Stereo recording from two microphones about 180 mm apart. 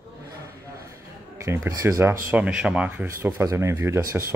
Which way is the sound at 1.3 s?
15° right (ahead or behind).